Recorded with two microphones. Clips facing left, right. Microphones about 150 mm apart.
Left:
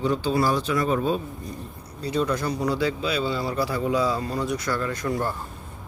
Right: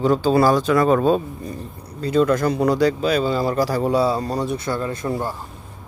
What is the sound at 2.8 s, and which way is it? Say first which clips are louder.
Speech: right 7 dB; 45° right (ahead or behind).